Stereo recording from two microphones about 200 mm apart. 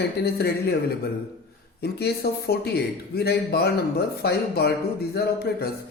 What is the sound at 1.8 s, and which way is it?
A man's voice, 55° left (ahead or behind).